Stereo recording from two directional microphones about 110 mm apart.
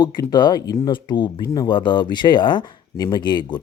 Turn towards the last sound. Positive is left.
turn(degrees=45)  # may be behind; listen again after turning